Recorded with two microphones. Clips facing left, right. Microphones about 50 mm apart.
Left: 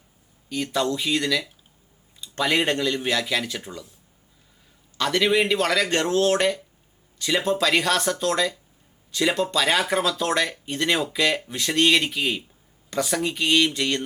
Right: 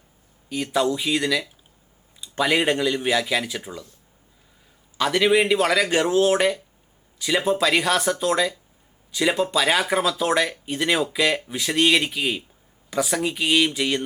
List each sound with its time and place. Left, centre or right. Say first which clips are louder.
0.4 s speech: right 2 dB; centre
4.9 s speech: right 2 dB; centre